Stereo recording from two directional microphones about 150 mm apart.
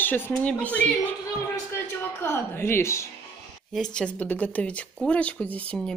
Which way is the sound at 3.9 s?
5° left (ahead or behind).